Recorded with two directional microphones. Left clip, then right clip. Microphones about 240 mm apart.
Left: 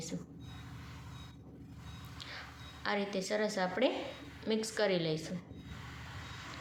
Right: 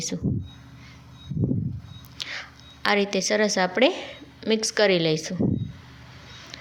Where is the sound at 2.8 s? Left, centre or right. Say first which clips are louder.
Right 13 dB; right.